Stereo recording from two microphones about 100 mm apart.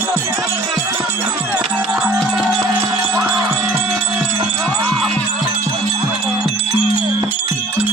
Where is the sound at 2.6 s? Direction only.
35° right (ahead or behind).